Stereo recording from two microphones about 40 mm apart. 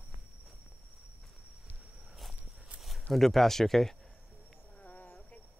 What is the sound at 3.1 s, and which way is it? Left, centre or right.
Speech, centre.